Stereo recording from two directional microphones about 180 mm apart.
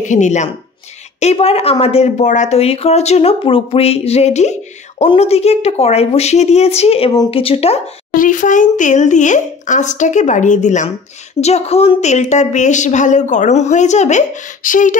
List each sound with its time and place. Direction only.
0.0 s speech: 45° left (ahead or behind)
8.1 s speech: 45° left (ahead or behind)